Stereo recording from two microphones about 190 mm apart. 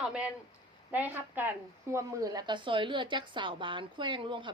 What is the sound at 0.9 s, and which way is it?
Speech, 10° right (ahead or behind).